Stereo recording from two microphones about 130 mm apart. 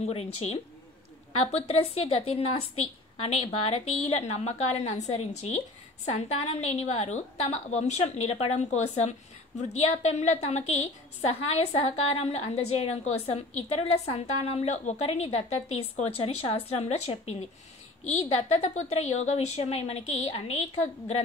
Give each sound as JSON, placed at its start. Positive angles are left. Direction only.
{"t": 0.0, "sound": "a woman's voice", "side_deg": 50}